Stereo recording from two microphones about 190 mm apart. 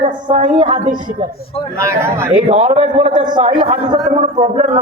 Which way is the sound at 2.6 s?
35° right (ahead or behind).